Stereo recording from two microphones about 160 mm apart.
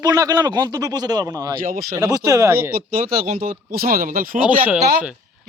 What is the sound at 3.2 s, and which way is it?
Speech, 55° right (ahead or behind).